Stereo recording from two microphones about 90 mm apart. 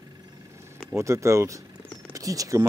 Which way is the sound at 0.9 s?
35° right (ahead or behind).